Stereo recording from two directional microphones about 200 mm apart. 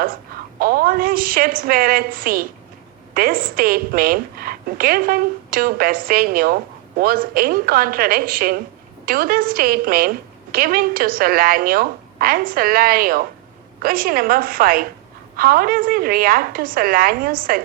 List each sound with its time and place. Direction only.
0.6 s a woman's voice: 45° right (ahead or behind)